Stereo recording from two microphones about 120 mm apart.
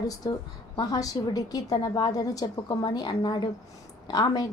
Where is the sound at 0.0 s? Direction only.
30° left (ahead or behind).